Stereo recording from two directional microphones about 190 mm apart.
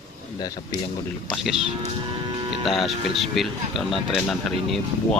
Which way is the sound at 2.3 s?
25° right (ahead or behind).